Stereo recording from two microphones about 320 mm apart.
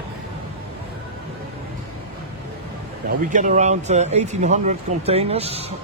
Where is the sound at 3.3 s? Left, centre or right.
Right.